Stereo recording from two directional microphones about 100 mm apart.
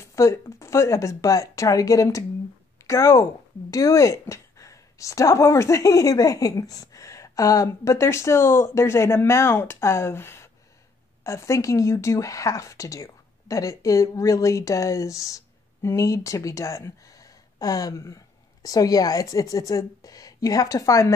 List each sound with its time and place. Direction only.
0.0 s a woman's voice: 30° left (ahead or behind)